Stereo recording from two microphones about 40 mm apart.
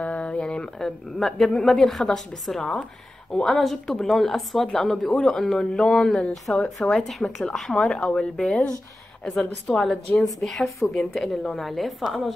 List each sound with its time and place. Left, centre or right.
0.0 s a sound: left
0.7 s a woman's voice: centre
3.3 s a woman's voice: centre
7.9 s speech: left
10.2 s a woman's voice: centre